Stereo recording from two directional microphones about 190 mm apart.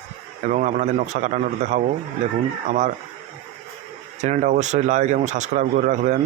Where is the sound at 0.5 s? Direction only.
45° right (ahead or behind).